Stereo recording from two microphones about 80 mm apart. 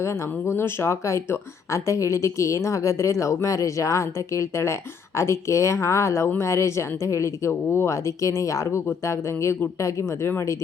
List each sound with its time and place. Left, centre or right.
0.0 s speech: left